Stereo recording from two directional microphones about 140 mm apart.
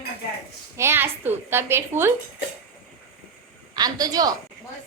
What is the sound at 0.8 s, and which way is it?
A woman's voice, 15° right (ahead or behind).